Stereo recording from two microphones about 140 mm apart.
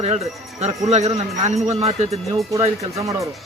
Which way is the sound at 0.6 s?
50° right (ahead or behind).